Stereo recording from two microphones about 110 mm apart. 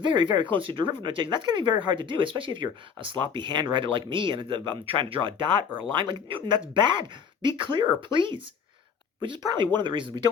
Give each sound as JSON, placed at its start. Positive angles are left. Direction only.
{"t": 0.0, "sound": "speech", "side_deg": -45}